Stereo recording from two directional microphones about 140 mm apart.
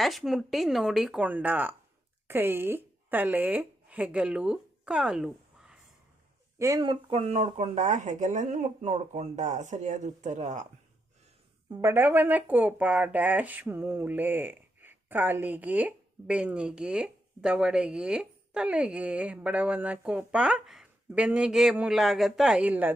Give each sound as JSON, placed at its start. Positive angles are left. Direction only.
{"t": 0.0, "sound": "speech", "side_deg": 0}
{"t": 6.6, "sound": "speech", "side_deg": -25}
{"t": 6.8, "sound": "speech", "side_deg": -40}
{"t": 11.7, "sound": "speech", "side_deg": -20}